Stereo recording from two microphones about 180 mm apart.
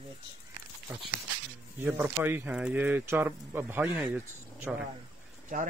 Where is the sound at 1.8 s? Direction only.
10° right (ahead or behind).